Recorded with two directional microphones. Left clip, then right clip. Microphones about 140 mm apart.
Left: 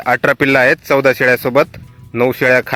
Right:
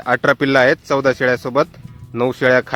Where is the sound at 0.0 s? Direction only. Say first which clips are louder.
Left 3 dB; 25° left (ahead or behind).